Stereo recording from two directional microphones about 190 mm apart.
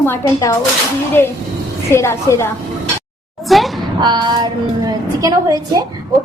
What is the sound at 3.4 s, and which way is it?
Speech, centre (ahead or behind).